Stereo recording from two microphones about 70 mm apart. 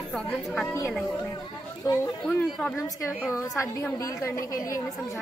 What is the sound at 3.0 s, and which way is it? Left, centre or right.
A woman's voice, left.